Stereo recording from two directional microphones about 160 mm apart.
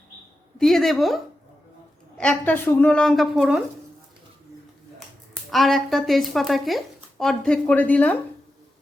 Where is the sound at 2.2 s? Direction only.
10° left (ahead or behind).